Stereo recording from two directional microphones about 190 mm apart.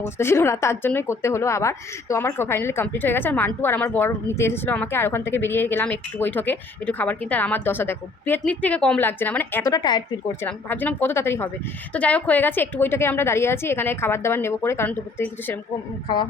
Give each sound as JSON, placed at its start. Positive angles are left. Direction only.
{"t": 0.0, "sound": "a woman's voice", "side_deg": 15}
{"t": 10.4, "sound": "a woman's voice", "side_deg": 10}